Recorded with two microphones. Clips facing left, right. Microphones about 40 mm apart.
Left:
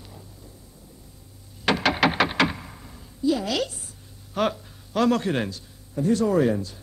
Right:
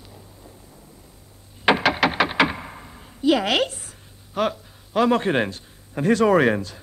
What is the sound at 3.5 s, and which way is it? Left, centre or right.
Speech, right.